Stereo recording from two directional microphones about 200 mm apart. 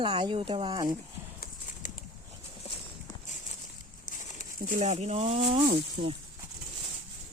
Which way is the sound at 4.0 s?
40° left (ahead or behind).